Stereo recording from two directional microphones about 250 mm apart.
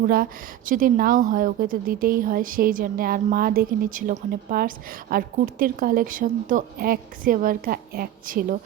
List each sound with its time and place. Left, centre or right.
0.0 s a woman's voice: right